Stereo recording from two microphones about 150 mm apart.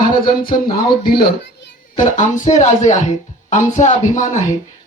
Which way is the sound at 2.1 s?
55° left (ahead or behind).